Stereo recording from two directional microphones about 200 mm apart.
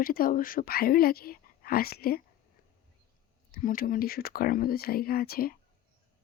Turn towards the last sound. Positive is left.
turn(degrees=50)  # may be behind; listen again after turning